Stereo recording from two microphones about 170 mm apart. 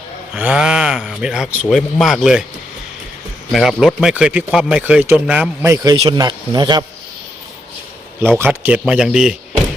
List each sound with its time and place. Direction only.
0.3 s a man's voice: 5° right (ahead or behind)
3.5 s a man's voice: centre (ahead or behind)
5.6 s speech: 20° right (ahead or behind)
8.4 s a man's voice: 10° right (ahead or behind)